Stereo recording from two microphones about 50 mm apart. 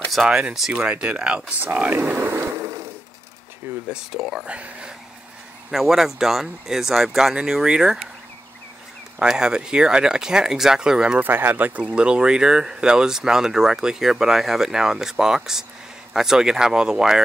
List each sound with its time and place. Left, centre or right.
0.1 s speech: centre
0.7 s speech: right
1.6 s speech: right
3.9 s speech: centre
4.5 s speech: right
5.7 s speech: centre
9.2 s speech: centre
11.1 s speech: right
11.8 s speech: right